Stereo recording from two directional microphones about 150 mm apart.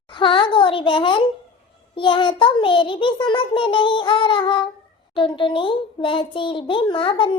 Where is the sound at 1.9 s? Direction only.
35° left (ahead or behind).